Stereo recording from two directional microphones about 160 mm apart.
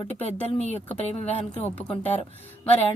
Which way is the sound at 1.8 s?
10° left (ahead or behind).